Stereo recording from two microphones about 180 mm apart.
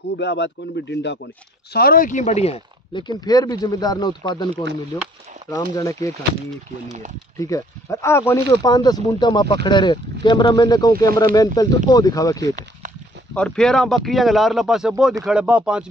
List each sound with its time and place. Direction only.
0.2 s a man's voice: 75° left (ahead or behind)
1.7 s speech: 60° left (ahead or behind); by 5.9 s 20° left (ahead or behind)
7.3 s speech: 15° left (ahead or behind)
13.3 s speech: 5° left (ahead or behind)